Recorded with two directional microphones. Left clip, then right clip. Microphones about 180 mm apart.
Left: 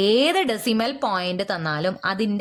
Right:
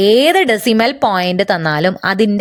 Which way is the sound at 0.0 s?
30° right (ahead or behind).